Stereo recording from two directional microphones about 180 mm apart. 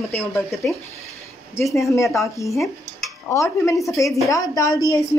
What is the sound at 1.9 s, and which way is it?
A woman's voice, 15° left (ahead or behind).